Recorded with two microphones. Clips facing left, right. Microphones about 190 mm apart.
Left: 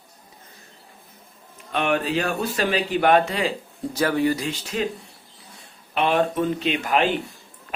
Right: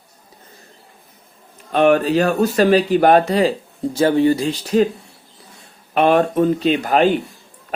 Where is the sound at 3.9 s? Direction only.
25° right (ahead or behind).